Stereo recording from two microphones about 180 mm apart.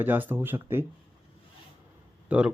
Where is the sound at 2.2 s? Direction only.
5° right (ahead or behind).